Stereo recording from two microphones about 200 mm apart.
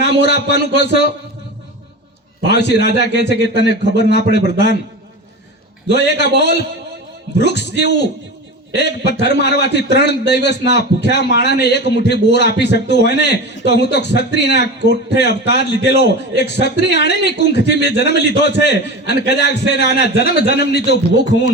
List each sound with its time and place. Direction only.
0.0 s a man's voice: 55° left (ahead or behind)
2.4 s a man's voice: 60° left (ahead or behind)
5.9 s a man's voice: 60° left (ahead or behind)